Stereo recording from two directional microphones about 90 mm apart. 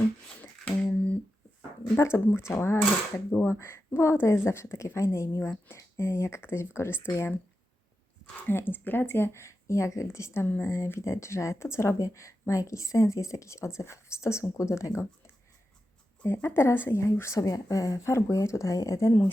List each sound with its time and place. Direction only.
0.4 s a sound: 20° left (ahead or behind)
2.0 s speech: 30° left (ahead or behind)
8.4 s speech: 20° left (ahead or behind)
10.4 s speech: 20° left (ahead or behind)
16.2 s speech: 30° left (ahead or behind)